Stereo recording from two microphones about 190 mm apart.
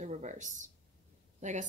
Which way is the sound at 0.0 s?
40° right (ahead or behind).